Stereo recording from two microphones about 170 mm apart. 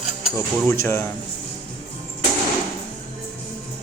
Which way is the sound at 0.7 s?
15° left (ahead or behind).